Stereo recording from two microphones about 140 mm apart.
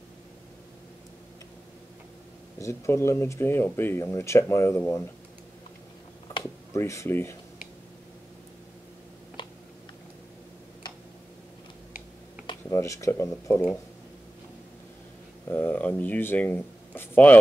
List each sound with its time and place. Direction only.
2.6 s speech: 20° left (ahead or behind)
6.7 s speech: 20° left (ahead or behind)
12.6 s speech: 20° left (ahead or behind)
15.4 s speech: 15° left (ahead or behind)